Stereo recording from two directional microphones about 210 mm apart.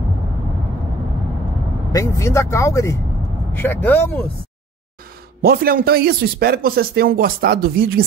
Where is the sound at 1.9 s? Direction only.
15° left (ahead or behind).